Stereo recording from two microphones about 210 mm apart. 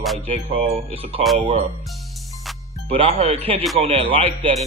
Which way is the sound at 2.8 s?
30° right (ahead or behind).